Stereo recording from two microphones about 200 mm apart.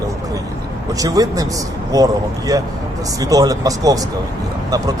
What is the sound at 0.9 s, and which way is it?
Speech, 20° right (ahead or behind).